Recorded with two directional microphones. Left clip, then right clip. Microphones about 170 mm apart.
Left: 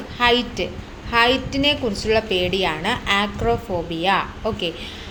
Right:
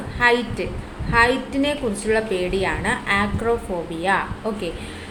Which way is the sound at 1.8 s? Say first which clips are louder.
Left 1 dB; 30° left (ahead or behind).